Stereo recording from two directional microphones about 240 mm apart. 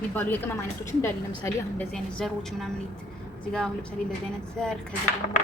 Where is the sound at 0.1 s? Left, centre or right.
Centre.